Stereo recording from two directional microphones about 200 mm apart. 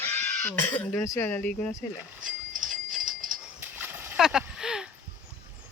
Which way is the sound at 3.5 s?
10° right (ahead or behind).